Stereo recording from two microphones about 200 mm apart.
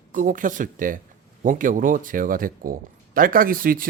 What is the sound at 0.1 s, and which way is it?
A man's voice, 40° right (ahead or behind).